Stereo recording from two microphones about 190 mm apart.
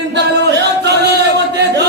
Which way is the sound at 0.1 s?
60° right (ahead or behind).